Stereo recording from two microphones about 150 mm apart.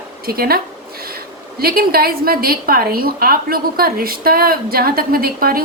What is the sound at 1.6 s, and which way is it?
A woman's voice, 90° right.